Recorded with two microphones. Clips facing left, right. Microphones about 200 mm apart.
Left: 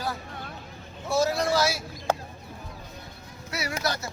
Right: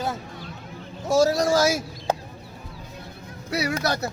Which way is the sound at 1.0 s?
40° right (ahead or behind).